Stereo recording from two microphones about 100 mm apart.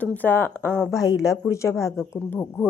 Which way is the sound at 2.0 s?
25° left (ahead or behind).